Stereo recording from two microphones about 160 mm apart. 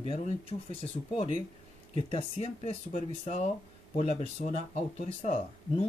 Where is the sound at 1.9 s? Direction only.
40° left (ahead or behind).